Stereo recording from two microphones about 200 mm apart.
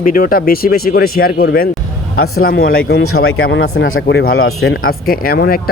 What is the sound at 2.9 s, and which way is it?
Speech, 75° left (ahead or behind).